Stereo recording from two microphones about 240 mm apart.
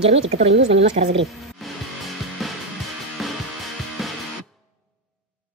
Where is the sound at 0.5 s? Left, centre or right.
Right.